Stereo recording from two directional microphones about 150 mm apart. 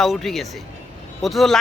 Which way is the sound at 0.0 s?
Centre (ahead or behind).